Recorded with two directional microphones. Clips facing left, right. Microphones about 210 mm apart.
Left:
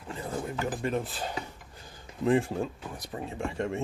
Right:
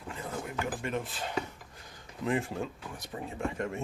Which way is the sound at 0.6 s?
35° left (ahead or behind).